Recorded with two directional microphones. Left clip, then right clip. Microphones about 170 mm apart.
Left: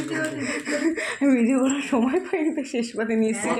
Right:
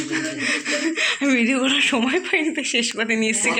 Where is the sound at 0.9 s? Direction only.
10° left (ahead or behind).